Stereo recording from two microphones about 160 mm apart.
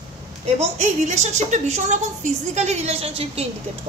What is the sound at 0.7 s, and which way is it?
A woman's voice, 45° right (ahead or behind).